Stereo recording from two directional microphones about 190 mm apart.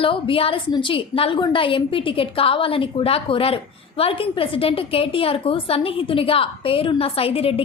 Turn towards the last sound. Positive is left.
turn(degrees=30)  # may be behind; listen again after turning